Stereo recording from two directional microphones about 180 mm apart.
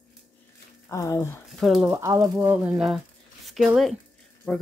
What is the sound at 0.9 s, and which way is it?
Speech, 15° left (ahead or behind).